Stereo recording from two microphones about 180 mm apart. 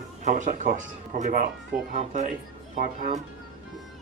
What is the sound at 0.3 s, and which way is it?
Speech, 45° right (ahead or behind).